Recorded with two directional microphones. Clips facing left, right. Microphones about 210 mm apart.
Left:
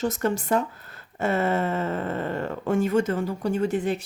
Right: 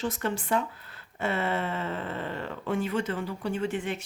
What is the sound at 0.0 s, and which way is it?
Speech, 45° left (ahead or behind).